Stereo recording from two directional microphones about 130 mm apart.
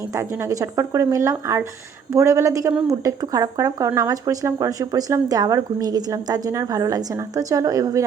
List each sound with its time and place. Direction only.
0.1 s speech: 20° right (ahead or behind)